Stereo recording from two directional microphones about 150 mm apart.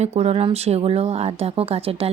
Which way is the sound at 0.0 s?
45° right (ahead or behind).